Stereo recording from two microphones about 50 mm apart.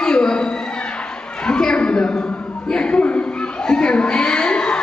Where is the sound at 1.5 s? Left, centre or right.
Centre.